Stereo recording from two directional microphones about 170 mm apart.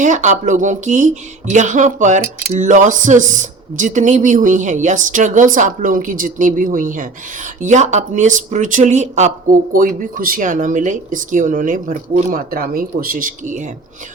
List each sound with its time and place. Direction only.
0.0 s speech: 45° right (ahead or behind)